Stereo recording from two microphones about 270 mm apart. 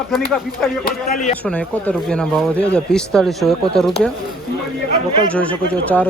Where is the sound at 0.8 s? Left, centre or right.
Left.